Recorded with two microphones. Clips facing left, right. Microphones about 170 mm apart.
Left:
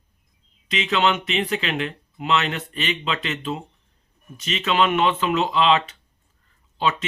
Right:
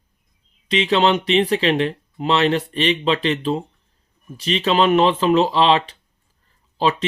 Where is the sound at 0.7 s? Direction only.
30° right (ahead or behind).